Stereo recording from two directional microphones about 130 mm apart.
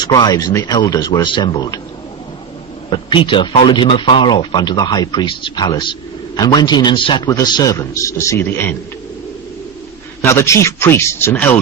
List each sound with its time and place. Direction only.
0.0 s speech: 30° left (ahead or behind)
2.9 s speech: 40° left (ahead or behind); by 8.7 s 15° left (ahead or behind)
10.2 s speech: 20° left (ahead or behind)